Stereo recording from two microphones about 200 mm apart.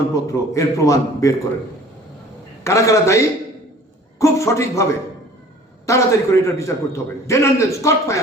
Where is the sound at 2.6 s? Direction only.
15° left (ahead or behind).